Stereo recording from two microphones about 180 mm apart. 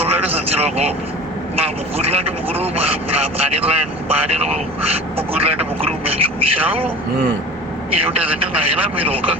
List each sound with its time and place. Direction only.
0.0 s vehicle: 35° right (ahead or behind)
1.5 s speech: 35° right (ahead or behind)
8.1 s speech: 30° right (ahead or behind)